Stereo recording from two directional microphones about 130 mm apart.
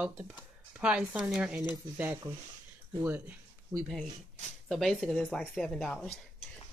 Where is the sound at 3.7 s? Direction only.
25° right (ahead or behind).